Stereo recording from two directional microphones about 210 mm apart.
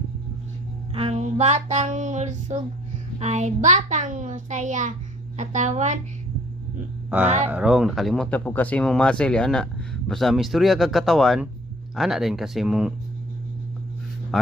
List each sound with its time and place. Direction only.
0.9 s a child's voice: 30° right (ahead or behind)
7.3 s a child's voice: 30° right (ahead or behind)
7.5 s speech: 5° right (ahead or behind)